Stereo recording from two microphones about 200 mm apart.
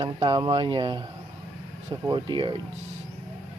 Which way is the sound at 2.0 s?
20° right (ahead or behind).